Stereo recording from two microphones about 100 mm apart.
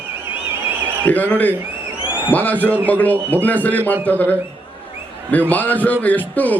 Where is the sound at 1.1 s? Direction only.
15° left (ahead or behind).